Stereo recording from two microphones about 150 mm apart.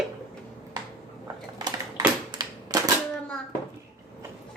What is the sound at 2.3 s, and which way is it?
Typewriter, 25° right (ahead or behind).